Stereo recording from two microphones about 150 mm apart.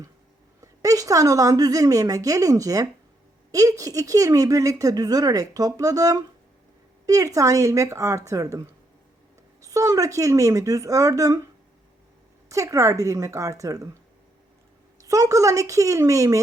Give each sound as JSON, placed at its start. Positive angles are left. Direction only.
{"t": 0.6, "sound": "speech", "side_deg": -25}
{"t": 12.5, "sound": "speech", "side_deg": -20}
{"t": 15.0, "sound": "speech", "side_deg": -25}